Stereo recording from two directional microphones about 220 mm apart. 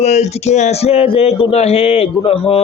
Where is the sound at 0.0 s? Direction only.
30° left (ahead or behind).